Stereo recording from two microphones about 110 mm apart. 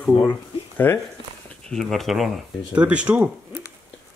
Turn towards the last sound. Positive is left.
turn(degrees=-10)  # may be behind; listen again after turning